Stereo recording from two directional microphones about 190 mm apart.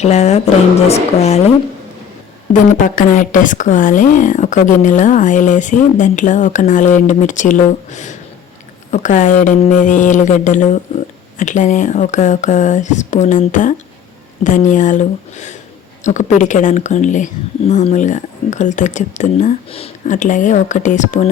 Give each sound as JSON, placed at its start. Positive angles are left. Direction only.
{"t": 0.0, "sound": "speech", "side_deg": 35}
{"t": 2.5, "sound": "speech", "side_deg": 45}